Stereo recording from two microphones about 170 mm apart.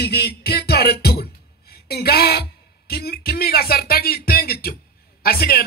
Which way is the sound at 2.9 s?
65° left (ahead or behind).